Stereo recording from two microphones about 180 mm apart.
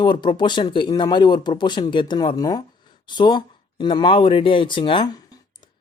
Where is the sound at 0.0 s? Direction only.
25° left (ahead or behind).